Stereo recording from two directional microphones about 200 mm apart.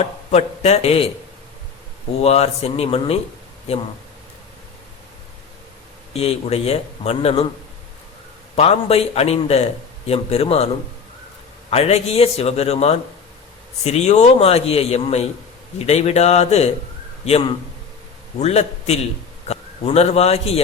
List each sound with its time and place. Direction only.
0.0 s a man's voice: 35° left (ahead or behind)
2.2 s a man's voice: 30° left (ahead or behind)
6.1 s a man's voice: 30° left (ahead or behind)
8.5 s a man's voice: 30° left (ahead or behind)
11.7 s a man's voice: 30° left (ahead or behind)